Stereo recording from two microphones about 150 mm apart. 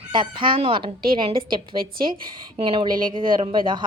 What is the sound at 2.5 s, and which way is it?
Speech, 35° right (ahead or behind).